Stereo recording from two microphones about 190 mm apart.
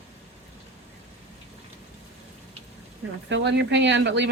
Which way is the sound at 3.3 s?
65° right (ahead or behind).